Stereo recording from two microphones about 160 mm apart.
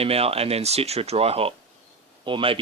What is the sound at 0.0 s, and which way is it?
Speech, 40° right (ahead or behind).